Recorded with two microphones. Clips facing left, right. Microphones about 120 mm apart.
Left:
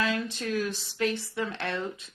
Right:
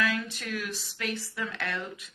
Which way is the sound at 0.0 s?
25° left (ahead or behind).